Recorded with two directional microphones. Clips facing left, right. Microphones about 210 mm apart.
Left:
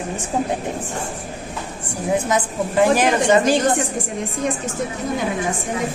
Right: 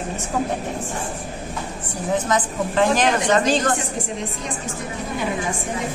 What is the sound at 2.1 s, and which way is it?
A woman's voice, 10° left (ahead or behind).